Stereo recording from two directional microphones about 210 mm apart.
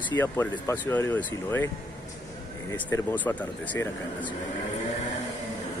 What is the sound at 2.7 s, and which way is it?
Speech, 10° left (ahead or behind).